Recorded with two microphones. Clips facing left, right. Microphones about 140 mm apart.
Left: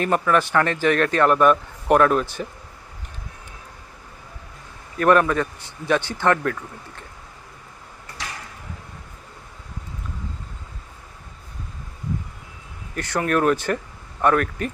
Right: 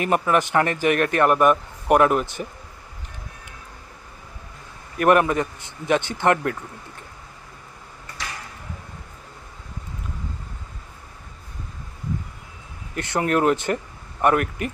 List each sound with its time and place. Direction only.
0.0 s a man's voice: 15° right (ahead or behind)
4.9 s speech: 20° right (ahead or behind)
12.9 s speech: 20° right (ahead or behind)